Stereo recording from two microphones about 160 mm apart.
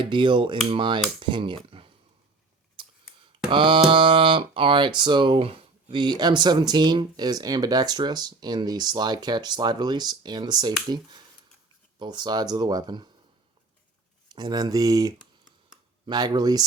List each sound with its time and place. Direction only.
0.0 s cutlery: 30° right (ahead or behind)
1.2 s speech: 30° right (ahead or behind)
2.8 s a sound: 30° right (ahead or behind)
3.5 s speech: 30° right (ahead or behind)
14.3 s speech: 25° right (ahead or behind)